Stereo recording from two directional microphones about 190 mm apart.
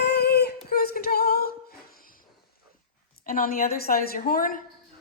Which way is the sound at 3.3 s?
50° left (ahead or behind).